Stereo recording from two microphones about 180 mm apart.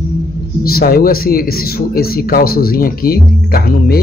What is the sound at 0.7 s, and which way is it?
Speech, 55° left (ahead or behind).